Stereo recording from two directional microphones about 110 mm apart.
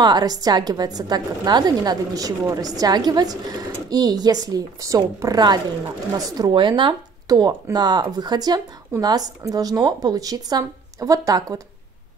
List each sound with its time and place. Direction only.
0.0 s a woman's voice: 35° right (ahead or behind)